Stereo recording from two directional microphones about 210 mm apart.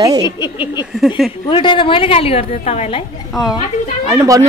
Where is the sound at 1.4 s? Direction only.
25° left (ahead or behind).